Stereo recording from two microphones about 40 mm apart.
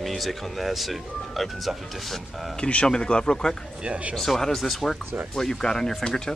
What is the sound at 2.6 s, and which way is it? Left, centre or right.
Speech, left.